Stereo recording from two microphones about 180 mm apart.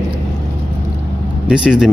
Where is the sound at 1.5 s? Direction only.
5° right (ahead or behind).